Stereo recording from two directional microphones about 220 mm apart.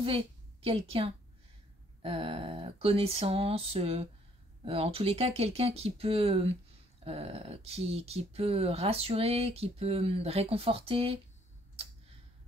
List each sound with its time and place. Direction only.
0.0 s a woman's voice: 25° right (ahead or behind)